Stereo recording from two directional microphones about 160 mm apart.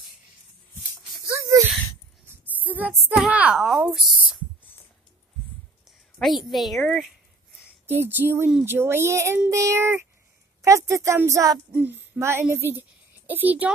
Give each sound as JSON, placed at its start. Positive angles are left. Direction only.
{"t": 1.3, "sound": "a sound", "side_deg": -20}
{"t": 2.6, "sound": "speech", "side_deg": -10}
{"t": 6.1, "sound": "a woman's voice", "side_deg": 0}
{"t": 7.8, "sound": "speech", "side_deg": -15}